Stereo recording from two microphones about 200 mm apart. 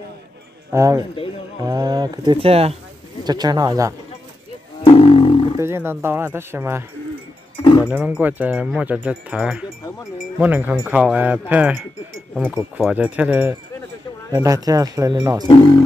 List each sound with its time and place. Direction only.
0.7 s speech: 15° right (ahead or behind)
3.3 s speech: 20° right (ahead or behind)
4.9 s roaring cats: 30° left (ahead or behind)
5.6 s speech: 10° right (ahead or behind)
7.6 s sheep: 25° left (ahead or behind)
7.9 s speech: 5° right (ahead or behind)
15.4 s speech: 20° left (ahead or behind)